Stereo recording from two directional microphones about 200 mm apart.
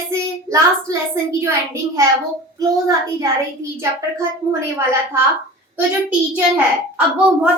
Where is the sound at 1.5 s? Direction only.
15° right (ahead or behind).